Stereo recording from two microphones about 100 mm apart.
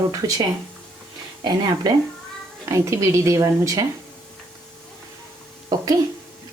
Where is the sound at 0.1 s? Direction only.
35° right (ahead or behind).